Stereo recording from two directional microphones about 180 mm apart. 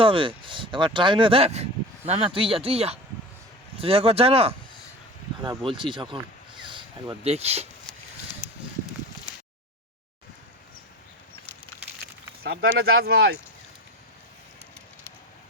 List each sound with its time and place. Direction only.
0.0 s speech: 30° right (ahead or behind)
12.4 s speech: 80° right; by 13.4 s 60° right (ahead or behind)